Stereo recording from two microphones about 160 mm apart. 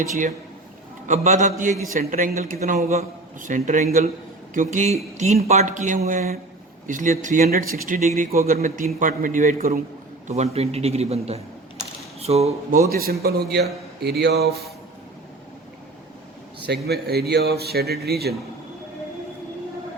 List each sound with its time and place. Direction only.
1.0 s a man's voice: 45° right (ahead or behind)
10.2 s a man's voice: 45° right (ahead or behind)
12.9 s a man's voice: 70° right (ahead or behind)
13.2 s speech: 90° right
16.6 s speech: 85° right